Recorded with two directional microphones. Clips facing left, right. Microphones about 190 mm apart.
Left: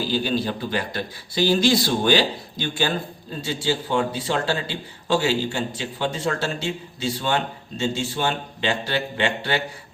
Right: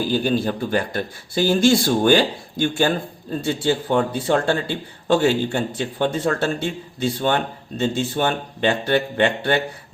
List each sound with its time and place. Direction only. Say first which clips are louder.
0.0 s a man's voice: right 3 dB; 50° right (ahead or behind)